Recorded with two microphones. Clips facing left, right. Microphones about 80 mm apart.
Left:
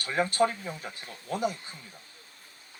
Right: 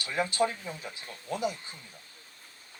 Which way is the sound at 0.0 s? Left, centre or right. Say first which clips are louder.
Left 3 dB; left.